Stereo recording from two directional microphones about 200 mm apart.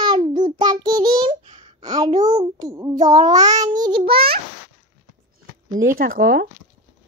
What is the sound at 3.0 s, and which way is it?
Child singing, 20° right (ahead or behind).